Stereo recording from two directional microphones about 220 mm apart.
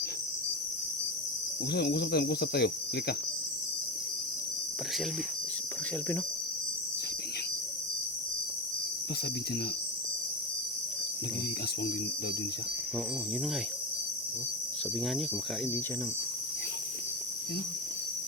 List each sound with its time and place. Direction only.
1.7 s cricket: 50° left (ahead or behind)